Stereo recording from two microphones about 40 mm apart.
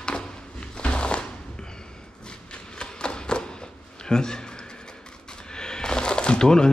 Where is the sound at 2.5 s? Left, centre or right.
Left.